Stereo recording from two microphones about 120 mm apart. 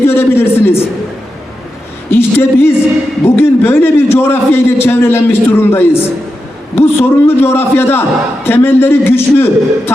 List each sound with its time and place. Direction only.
0.0 s a man's voice: 20° left (ahead or behind)
2.0 s a sound: 20° left (ahead or behind)
3.2 s a man's voice: 20° left (ahead or behind)